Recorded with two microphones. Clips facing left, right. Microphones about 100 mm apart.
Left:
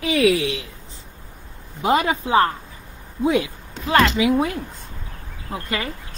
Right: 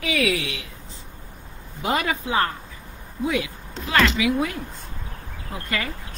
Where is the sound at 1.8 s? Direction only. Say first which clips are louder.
Left 5 dB; 25° left (ahead or behind).